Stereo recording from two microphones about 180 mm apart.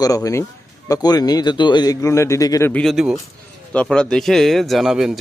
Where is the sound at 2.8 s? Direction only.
Centre (ahead or behind).